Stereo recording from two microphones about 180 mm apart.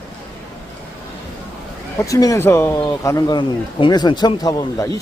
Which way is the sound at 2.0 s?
20° left (ahead or behind).